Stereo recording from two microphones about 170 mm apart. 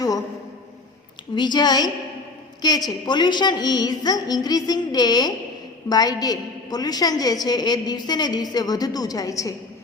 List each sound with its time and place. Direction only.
1.4 s a woman's voice: 25° left (ahead or behind)